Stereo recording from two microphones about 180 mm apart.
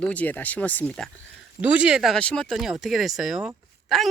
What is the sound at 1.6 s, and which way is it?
Speech, 5° right (ahead or behind).